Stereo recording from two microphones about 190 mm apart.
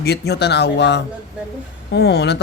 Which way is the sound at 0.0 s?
60° left (ahead or behind).